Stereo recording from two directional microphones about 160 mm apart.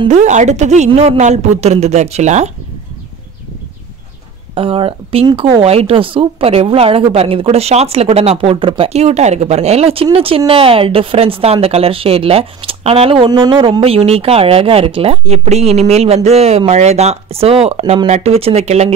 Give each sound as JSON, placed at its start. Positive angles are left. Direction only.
{"t": 0.1, "sound": "a woman's voice", "side_deg": -45}
{"t": 4.6, "sound": "a woman's voice", "side_deg": -35}